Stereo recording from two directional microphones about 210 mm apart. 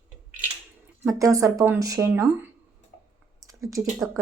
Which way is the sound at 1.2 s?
15° right (ahead or behind).